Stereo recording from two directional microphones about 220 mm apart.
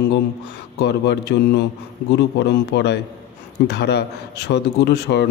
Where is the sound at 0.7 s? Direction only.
50° left (ahead or behind).